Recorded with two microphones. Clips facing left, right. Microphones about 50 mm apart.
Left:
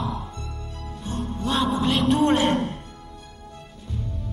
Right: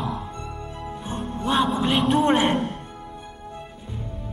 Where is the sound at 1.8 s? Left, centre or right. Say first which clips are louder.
Left 1 dB; centre.